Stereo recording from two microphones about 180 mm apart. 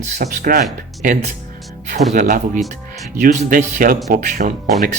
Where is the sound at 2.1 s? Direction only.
50° right (ahead or behind).